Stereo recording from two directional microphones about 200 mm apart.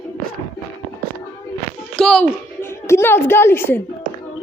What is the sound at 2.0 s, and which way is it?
A woman's voice, 5° left (ahead or behind).